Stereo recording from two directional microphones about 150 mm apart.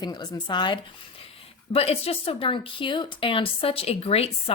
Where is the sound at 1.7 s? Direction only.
40° left (ahead or behind).